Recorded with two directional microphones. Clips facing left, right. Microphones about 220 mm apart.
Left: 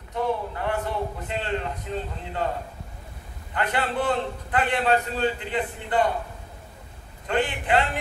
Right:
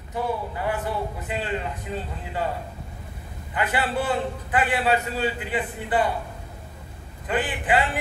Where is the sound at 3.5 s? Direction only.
5° right (ahead or behind).